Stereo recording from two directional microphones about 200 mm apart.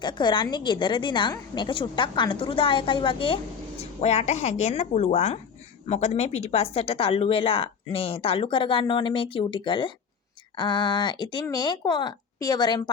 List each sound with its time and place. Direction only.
0.0 s speech: 20° left (ahead or behind)